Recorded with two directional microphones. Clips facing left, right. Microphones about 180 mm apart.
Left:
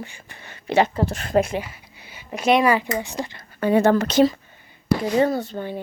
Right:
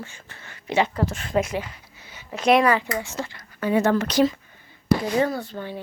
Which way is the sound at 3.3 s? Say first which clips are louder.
Left 3 dB; 30° left (ahead or behind).